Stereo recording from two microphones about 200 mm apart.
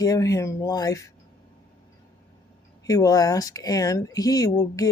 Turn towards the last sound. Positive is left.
turn(degrees=15)  # may be behind; listen again after turning